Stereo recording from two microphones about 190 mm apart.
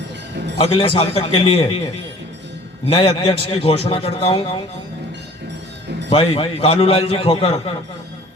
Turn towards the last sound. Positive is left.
turn(degrees=30)  # may be behind; listen again after turning